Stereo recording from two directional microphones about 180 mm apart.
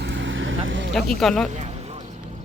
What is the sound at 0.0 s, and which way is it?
Vehicle, 85° right.